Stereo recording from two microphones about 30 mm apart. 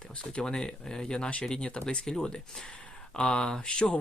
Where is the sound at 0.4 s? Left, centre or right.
Left.